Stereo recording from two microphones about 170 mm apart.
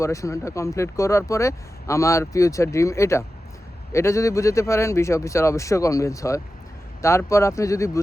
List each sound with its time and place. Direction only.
0.0 s speech: 20° left (ahead or behind)